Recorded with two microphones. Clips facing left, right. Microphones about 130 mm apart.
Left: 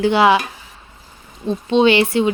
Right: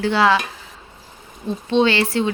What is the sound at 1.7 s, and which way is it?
Speech, 15° left (ahead or behind).